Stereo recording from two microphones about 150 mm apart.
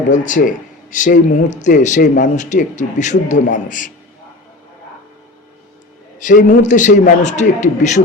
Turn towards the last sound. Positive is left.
turn(degrees=55)  # may be behind; listen again after turning